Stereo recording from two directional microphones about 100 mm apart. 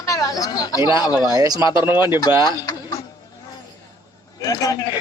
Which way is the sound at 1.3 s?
35° right (ahead or behind).